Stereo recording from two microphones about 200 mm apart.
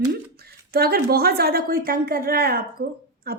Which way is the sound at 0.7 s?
50° right (ahead or behind).